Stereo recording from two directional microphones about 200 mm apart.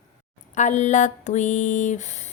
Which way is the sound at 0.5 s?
35° left (ahead or behind).